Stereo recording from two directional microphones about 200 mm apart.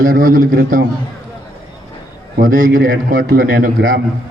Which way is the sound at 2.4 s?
45° right (ahead or behind).